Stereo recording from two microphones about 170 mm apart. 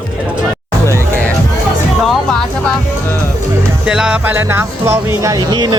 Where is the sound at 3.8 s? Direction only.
5° right (ahead or behind); by 5.8 s 25° right (ahead or behind).